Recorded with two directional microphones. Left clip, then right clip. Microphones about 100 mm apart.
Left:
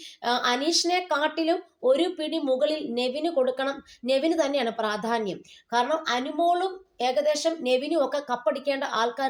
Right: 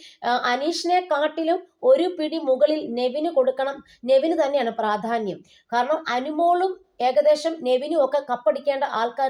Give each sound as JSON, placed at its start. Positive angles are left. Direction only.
{"t": 0.2, "sound": "speech", "side_deg": -40}